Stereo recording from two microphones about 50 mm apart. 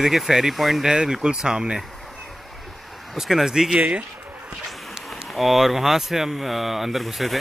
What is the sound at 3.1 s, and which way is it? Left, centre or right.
Speech, centre.